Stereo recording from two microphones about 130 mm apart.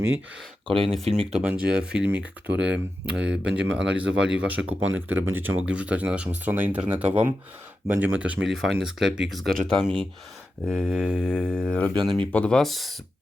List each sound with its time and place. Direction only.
0.7 s speech: 45° right (ahead or behind)
1.3 s speech: 10° right (ahead or behind)